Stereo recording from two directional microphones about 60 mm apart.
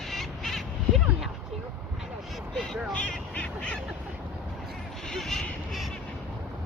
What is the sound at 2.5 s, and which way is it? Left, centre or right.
Cat, centre.